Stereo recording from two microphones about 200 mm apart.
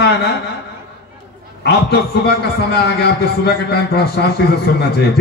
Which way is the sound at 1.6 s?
55° left (ahead or behind).